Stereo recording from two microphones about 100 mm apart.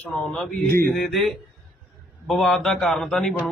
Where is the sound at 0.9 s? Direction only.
Centre (ahead or behind).